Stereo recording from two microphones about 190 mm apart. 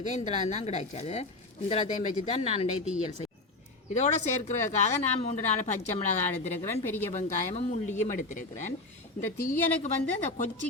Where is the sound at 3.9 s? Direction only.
35° left (ahead or behind).